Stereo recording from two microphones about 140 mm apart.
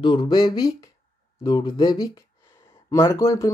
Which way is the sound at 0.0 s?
35° left (ahead or behind).